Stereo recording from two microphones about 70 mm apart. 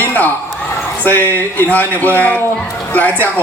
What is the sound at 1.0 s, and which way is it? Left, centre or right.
A man's voice, left.